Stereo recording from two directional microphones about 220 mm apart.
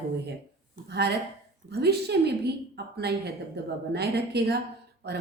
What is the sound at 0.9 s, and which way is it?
A woman's voice, 50° right (ahead or behind).